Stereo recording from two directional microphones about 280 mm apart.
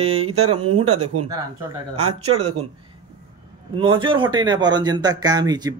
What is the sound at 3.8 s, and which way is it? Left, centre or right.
Speech, centre.